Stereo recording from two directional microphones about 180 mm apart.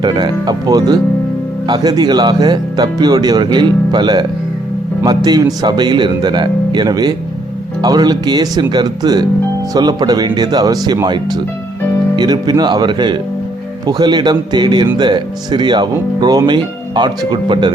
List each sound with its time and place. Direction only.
0.0 s speech: 25° right (ahead or behind)